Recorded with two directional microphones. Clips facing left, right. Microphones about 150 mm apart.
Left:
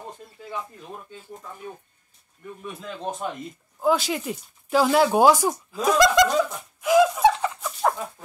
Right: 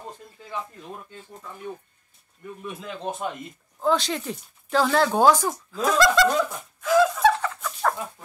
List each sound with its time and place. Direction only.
2.6 s a man's voice: centre (ahead or behind); by 6.2 s 15° left (ahead or behind)
6.8 s laughter: 15° left (ahead or behind)